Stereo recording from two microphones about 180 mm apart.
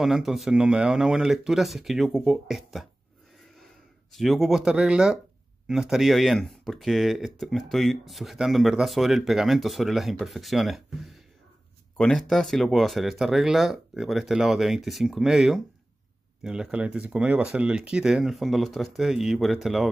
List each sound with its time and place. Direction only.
0.0 s speech: centre (ahead or behind)
4.1 s speech: centre (ahead or behind)